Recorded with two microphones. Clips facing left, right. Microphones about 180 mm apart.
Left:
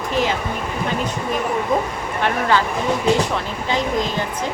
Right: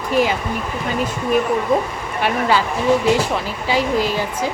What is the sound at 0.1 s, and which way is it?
Speech, 10° right (ahead or behind).